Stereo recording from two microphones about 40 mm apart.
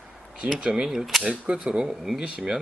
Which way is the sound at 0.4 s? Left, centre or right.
Right.